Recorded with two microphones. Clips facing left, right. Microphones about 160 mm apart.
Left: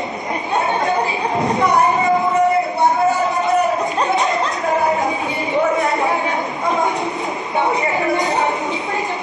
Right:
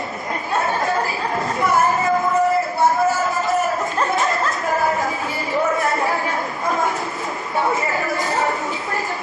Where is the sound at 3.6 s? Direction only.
20° left (ahead or behind).